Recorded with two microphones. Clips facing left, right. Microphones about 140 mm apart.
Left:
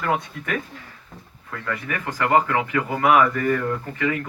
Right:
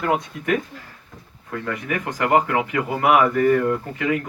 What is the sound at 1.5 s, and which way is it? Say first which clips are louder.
Speech: right 3 dB; 25° right (ahead or behind).